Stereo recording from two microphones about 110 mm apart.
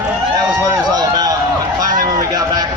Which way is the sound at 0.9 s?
35° right (ahead or behind).